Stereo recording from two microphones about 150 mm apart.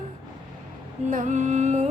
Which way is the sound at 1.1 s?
55° right (ahead or behind).